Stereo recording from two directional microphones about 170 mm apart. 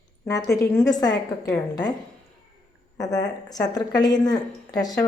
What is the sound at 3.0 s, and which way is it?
A woman's voice, 20° left (ahead or behind).